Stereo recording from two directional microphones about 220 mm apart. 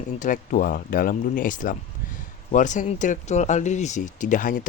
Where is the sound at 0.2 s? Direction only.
40° left (ahead or behind).